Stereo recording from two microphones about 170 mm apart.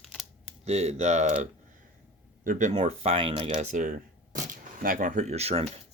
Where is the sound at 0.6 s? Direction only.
40° right (ahead or behind).